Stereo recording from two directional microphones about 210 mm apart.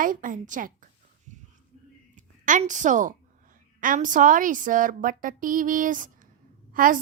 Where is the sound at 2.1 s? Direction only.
35° right (ahead or behind).